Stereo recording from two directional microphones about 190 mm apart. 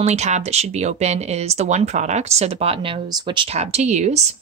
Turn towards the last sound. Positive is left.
turn(degrees=-35)  # may be behind; listen again after turning